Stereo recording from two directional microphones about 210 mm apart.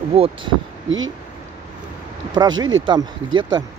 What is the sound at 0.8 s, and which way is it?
Speech, 65° right (ahead or behind).